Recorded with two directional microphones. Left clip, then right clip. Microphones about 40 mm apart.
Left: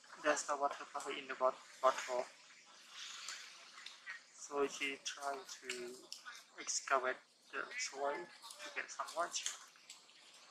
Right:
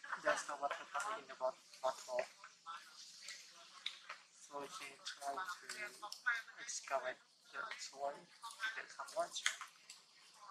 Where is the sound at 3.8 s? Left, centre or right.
Centre.